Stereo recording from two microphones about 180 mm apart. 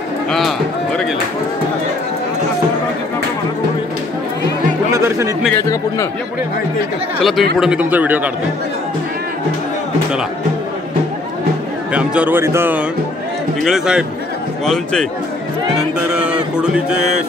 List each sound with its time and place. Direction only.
0.3 s run: centre (ahead or behind)
4.9 s a sound: 15° right (ahead or behind)
5.5 s speech: 15° left (ahead or behind)
7.2 s a man's voice: centre (ahead or behind)
11.9 s speech: 5° right (ahead or behind)
13.6 s a man's voice: centre (ahead or behind)
16.1 s a sound: 5° right (ahead or behind)
16.5 s a man's voice: 5° right (ahead or behind)